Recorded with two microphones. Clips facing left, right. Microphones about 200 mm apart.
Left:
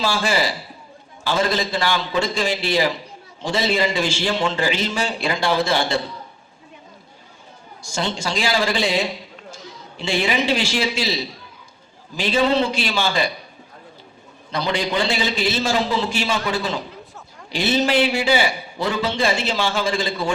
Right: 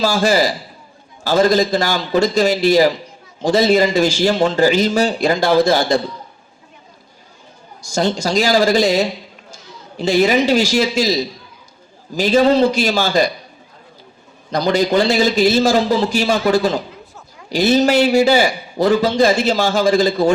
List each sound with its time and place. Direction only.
0.0 s a man's voice: 40° right (ahead or behind)
7.8 s a man's voice: 40° right (ahead or behind)
14.5 s a man's voice: 40° right (ahead or behind)